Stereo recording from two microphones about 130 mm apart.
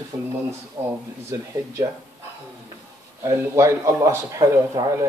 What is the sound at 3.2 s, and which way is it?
Speech, 20° right (ahead or behind).